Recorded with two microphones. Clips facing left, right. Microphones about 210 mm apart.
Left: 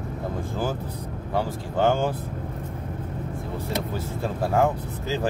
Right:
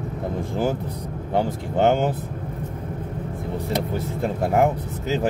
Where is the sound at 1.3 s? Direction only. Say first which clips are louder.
Right 3 dB; 25° right (ahead or behind).